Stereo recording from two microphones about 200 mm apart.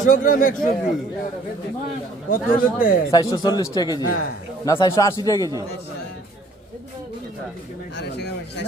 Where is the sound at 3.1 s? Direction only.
20° left (ahead or behind).